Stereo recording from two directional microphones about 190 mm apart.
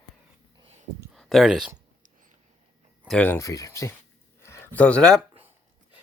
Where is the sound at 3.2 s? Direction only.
10° left (ahead or behind).